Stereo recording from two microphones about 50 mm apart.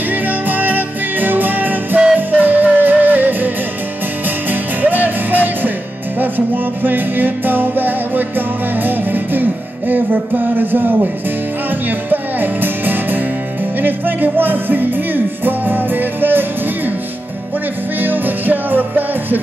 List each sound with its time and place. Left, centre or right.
0.1 s music: right
17.9 s music: right